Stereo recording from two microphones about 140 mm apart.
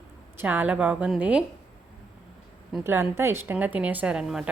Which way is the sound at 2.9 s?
15° right (ahead or behind).